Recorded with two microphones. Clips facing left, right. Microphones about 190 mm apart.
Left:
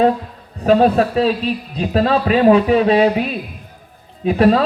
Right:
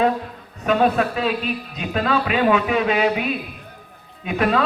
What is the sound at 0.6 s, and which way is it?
A man's voice, 35° left (ahead or behind).